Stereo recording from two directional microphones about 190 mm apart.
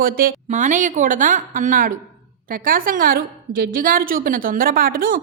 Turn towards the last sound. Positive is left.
turn(degrees=-45)  # may be behind; listen again after turning